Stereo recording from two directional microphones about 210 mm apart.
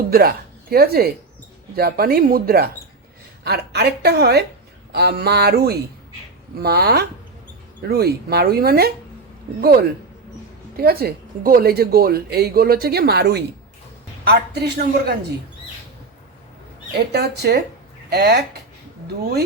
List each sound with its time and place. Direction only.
0.1 s a woman's voice: 45° right (ahead or behind)
17.1 s a woman's voice: 50° right (ahead or behind)